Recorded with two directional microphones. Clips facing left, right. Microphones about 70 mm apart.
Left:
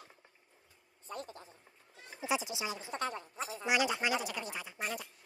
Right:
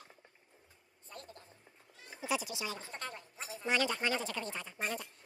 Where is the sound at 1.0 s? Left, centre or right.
Left.